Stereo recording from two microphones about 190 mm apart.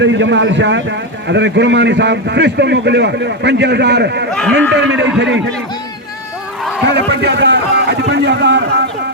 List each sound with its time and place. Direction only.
0.0 s a man's voice: 70° right (ahead or behind)
6.9 s a man's voice: 60° right (ahead or behind)